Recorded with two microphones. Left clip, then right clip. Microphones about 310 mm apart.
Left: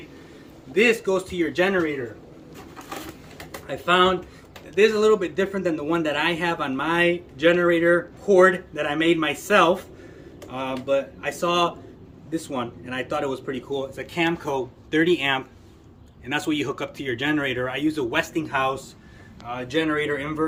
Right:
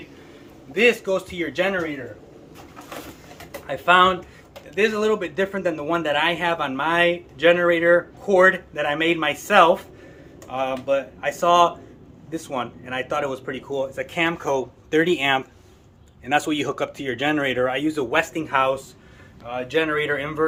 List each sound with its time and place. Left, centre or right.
0.7 s speech: centre
3.7 s a man's voice: centre